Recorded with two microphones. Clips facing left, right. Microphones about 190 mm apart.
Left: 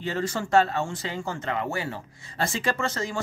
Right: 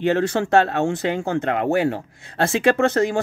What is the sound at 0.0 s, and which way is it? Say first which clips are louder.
Speech: right 9 dB; 70° right (ahead or behind).